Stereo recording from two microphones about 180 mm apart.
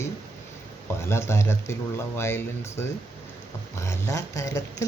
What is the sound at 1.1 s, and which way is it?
Speech, 15° left (ahead or behind).